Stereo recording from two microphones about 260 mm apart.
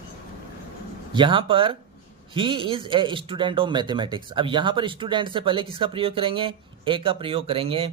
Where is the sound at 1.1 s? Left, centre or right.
Centre.